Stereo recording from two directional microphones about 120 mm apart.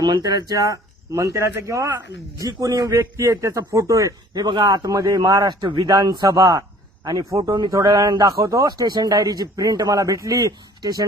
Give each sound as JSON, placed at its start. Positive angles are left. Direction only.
{"t": 0.0, "sound": "a man's voice", "side_deg": -35}
{"t": 4.4, "sound": "speech", "side_deg": -40}